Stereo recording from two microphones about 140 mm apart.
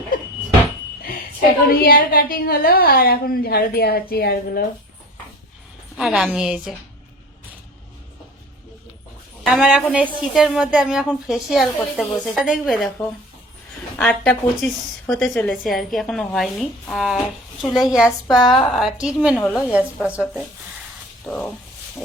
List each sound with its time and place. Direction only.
1.7 s a woman's voice: 90° left
6.0 s a woman's voice: 5° right (ahead or behind)
9.4 s a woman's voice: 5° right (ahead or behind)
14.0 s a woman's voice: 5° left (ahead or behind)
21.2 s speech: 10° left (ahead or behind)